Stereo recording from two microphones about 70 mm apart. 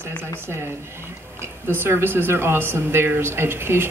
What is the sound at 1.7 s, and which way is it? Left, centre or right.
Speech, right.